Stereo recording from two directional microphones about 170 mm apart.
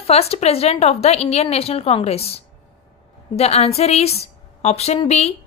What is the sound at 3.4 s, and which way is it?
A woman's voice, 40° left (ahead or behind).